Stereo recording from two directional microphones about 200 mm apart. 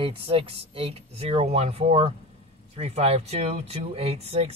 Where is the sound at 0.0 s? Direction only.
25° right (ahead or behind).